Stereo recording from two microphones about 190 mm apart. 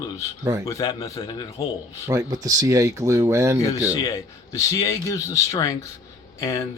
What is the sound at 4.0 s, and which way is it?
A man's voice, 15° left (ahead or behind).